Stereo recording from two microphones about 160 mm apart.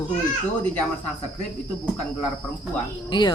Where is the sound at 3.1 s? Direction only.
30° left (ahead or behind).